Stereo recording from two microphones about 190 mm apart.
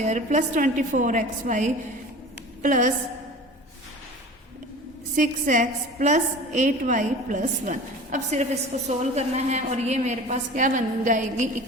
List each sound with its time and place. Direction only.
0.0 s a woman's voice: 40° right (ahead or behind)
5.1 s a woman's voice: 40° right (ahead or behind)